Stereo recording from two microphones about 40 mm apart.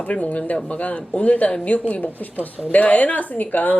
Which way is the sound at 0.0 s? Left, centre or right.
Left.